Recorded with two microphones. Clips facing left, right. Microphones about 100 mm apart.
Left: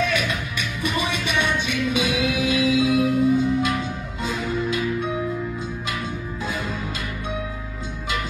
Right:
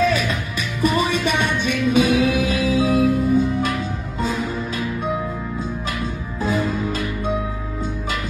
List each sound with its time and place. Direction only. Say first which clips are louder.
0.1 s music: right 3 dB; 40° right (ahead or behind)